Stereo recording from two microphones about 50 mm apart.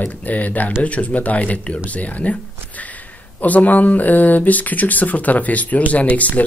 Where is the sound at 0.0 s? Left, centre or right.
Left.